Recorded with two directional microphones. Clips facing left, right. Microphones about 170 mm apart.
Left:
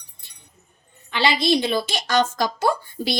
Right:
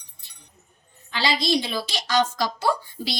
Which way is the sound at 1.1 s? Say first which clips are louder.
Left 4 dB; 60° left (ahead or behind).